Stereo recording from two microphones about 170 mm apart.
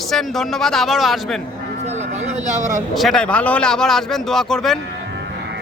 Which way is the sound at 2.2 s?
45° right (ahead or behind).